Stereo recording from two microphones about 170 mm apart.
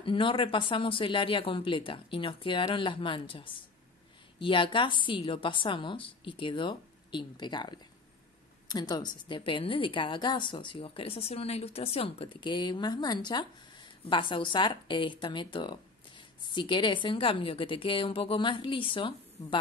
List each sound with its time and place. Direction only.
0.0 s a woman's voice: 30° left (ahead or behind)